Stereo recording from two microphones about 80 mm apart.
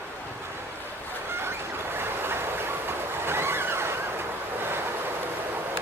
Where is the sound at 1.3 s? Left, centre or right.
Right.